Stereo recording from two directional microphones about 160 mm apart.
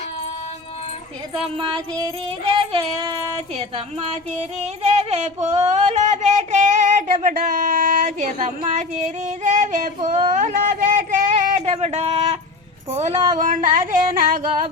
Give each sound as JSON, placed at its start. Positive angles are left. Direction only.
{"t": 1.5, "sound": "music", "side_deg": -25}
{"t": 3.5, "sound": "music", "side_deg": -40}
{"t": 4.5, "sound": "a sound", "side_deg": -45}